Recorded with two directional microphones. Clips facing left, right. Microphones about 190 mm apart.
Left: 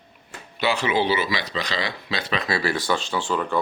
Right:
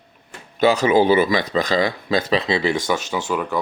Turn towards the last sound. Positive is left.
turn(degrees=-10)  # may be behind; listen again after turning